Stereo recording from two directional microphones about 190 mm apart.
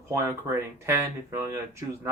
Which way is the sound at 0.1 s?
15° right (ahead or behind).